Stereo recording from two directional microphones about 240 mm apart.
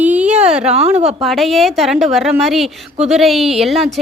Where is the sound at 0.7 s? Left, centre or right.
Right.